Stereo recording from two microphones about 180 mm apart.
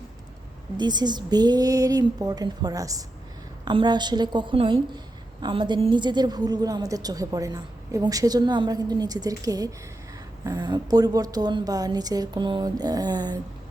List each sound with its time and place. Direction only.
0.8 s a woman's voice: 25° right (ahead or behind)